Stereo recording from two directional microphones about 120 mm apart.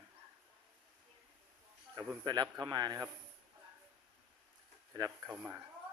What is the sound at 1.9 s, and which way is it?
Speech, 35° right (ahead or behind).